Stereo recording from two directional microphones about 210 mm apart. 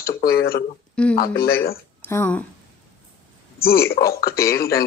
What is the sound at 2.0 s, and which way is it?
Speech, 10° left (ahead or behind).